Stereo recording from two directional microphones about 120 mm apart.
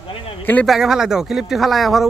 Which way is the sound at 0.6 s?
5° right (ahead or behind).